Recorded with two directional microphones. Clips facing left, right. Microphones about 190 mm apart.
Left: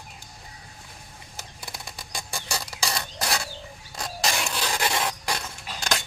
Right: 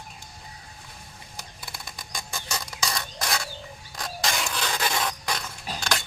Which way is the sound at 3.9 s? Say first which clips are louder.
Left 1 dB; 25° left (ahead or behind).